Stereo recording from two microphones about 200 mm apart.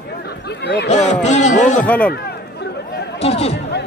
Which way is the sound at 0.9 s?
35° left (ahead or behind).